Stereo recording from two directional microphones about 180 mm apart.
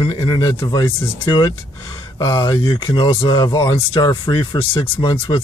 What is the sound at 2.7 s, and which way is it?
Speech, 30° left (ahead or behind).